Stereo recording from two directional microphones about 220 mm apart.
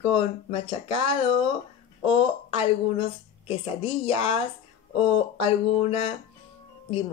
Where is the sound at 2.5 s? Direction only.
25° left (ahead or behind).